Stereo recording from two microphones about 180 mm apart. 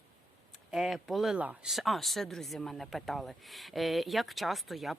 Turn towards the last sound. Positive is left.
turn(degrees=0)  # may be behind; listen again after turning